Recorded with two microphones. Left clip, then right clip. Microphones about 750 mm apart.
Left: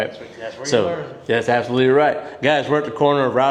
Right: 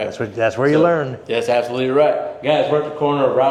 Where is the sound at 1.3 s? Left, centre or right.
Left.